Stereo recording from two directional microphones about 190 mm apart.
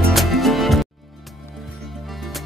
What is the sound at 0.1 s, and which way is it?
Music, centre (ahead or behind).